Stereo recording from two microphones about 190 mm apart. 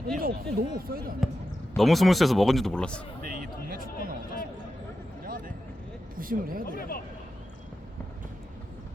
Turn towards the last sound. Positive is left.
turn(degrees=50)  # may be behind; listen again after turning